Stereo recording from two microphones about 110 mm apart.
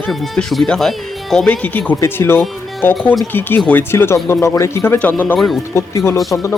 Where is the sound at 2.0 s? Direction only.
25° left (ahead or behind).